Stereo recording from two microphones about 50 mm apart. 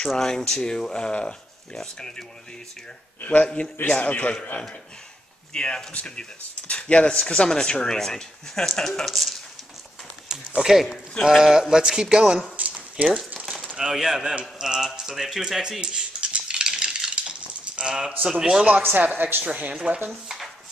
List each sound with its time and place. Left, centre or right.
0.1 s speech: centre
3.6 s a man's voice: left; by 9.3 s centre
10.2 s speech: centre
12.5 s a sound: right
13.7 s speech: centre
15.8 s cutlery: centre
16.7 s a sound: centre
18.2 s speech: centre
18.9 s speech: right
19.4 s speech: right